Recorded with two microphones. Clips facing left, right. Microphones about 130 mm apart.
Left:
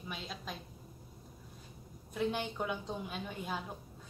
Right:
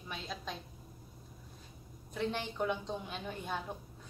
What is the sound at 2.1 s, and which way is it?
A woman's voice, 5° left (ahead or behind).